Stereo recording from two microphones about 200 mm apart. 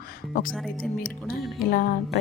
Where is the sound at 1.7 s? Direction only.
45° left (ahead or behind).